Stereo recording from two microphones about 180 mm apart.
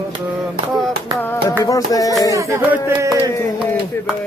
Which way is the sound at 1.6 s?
20° left (ahead or behind).